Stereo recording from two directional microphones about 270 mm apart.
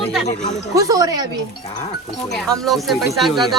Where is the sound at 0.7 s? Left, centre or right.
Centre.